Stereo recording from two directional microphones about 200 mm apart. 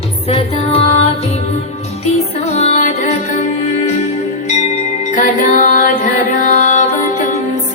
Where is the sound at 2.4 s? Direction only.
35° left (ahead or behind).